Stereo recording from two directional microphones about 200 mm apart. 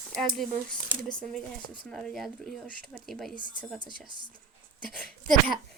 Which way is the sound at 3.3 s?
25° left (ahead or behind).